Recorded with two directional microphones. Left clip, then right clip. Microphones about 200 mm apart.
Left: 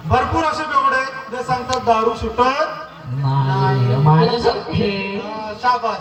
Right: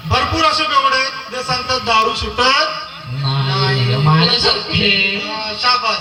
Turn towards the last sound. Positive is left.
turn(degrees=45)  # may be behind; listen again after turning